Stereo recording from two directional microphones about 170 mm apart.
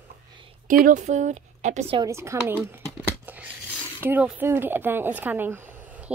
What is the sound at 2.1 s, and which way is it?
Speech, 15° right (ahead or behind).